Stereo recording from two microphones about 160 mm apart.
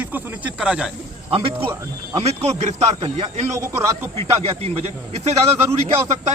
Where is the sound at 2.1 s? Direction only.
45° right (ahead or behind).